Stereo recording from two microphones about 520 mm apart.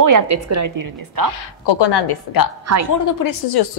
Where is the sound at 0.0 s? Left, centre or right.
Right.